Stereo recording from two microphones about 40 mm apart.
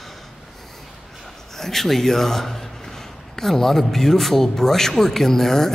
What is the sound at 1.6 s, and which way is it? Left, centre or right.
Speech, centre.